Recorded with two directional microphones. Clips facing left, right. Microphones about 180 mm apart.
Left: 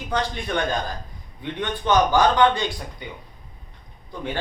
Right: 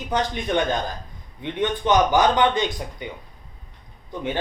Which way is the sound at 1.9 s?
20° right (ahead or behind).